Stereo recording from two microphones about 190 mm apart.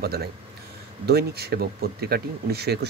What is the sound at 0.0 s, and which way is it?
Speech, 55° right (ahead or behind).